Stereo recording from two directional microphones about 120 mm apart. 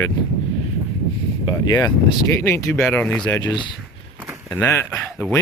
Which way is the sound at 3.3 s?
35° left (ahead or behind).